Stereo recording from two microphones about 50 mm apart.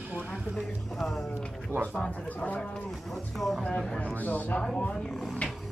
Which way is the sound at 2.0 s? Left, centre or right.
Left.